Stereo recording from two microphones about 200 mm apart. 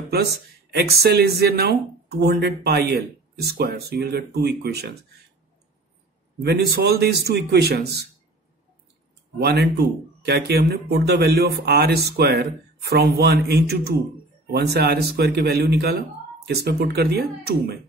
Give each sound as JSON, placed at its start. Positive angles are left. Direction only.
{"t": 0.7, "sound": "speech", "side_deg": -50}
{"t": 6.4, "sound": "speech", "side_deg": -55}
{"t": 9.4, "sound": "speech", "side_deg": -55}